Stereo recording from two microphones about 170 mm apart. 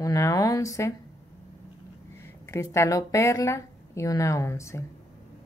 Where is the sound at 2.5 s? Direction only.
15° left (ahead or behind).